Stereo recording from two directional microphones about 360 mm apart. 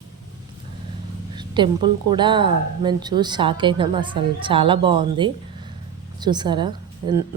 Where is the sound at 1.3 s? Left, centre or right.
Centre.